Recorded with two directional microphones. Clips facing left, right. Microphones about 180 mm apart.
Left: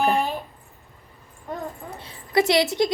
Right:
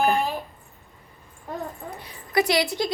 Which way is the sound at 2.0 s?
25° left (ahead or behind).